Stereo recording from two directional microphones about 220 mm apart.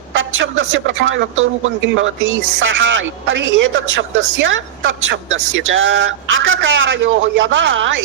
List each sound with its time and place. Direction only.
0.1 s speech: 60° right (ahead or behind)